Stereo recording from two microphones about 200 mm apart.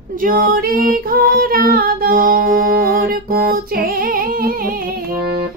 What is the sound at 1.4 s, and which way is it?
Music, 45° right (ahead or behind).